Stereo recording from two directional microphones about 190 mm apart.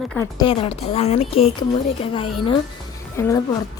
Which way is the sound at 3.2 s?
15° left (ahead or behind).